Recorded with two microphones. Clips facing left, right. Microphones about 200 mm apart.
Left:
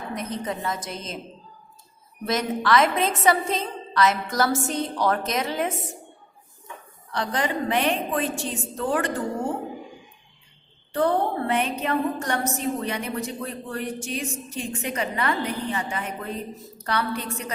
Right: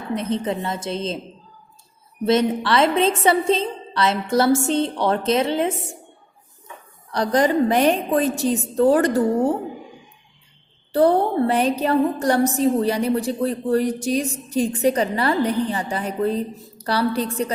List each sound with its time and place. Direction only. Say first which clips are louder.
0.1 s a woman's voice: right 8 dB; 30° right (ahead or behind)
2.2 s a woman's voice: right 6 dB; 30° right (ahead or behind)
7.1 s a woman's voice: right 8 dB; 40° right (ahead or behind)
10.9 s a woman's voice: right 6 dB; 35° right (ahead or behind)